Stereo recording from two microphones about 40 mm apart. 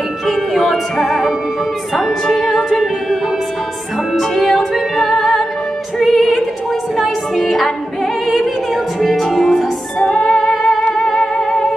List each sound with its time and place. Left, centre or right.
0.3 s music: centre
2.4 s music: centre
4.1 s music: centre
9.9 s music: centre